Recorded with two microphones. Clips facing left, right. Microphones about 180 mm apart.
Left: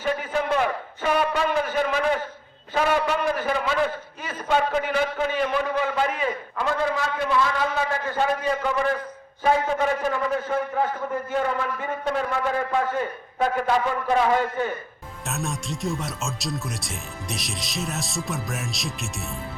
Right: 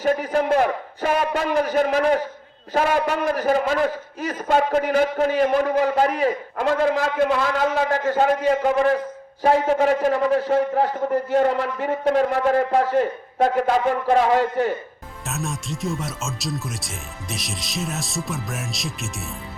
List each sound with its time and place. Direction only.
0.0 s a man's voice: 40° right (ahead or behind)
4.2 s a sound: 40° right (ahead or behind)
4.7 s a man's voice: 40° right (ahead or behind)
7.2 s a man's voice: 55° right (ahead or behind)
9.4 s a man's voice: 35° right (ahead or behind)
15.3 s speech: centre (ahead or behind)